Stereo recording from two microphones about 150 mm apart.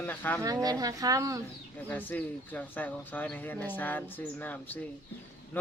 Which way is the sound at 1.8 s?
10° left (ahead or behind).